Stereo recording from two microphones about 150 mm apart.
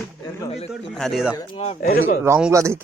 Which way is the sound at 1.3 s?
30° left (ahead or behind).